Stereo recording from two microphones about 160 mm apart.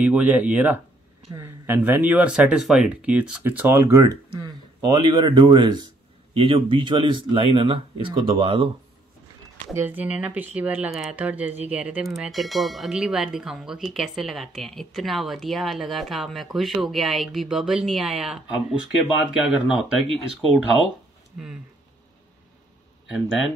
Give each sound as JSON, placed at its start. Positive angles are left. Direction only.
{"t": 0.0, "sound": "speech", "side_deg": -10}
{"t": 9.8, "sound": "speech", "side_deg": -10}
{"t": 23.0, "sound": "speech", "side_deg": -5}